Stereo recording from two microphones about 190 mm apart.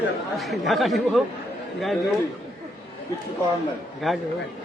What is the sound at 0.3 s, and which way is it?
Speech, centre (ahead or behind).